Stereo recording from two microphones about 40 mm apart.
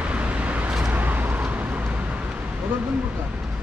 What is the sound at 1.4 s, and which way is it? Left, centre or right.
Vehicle, right.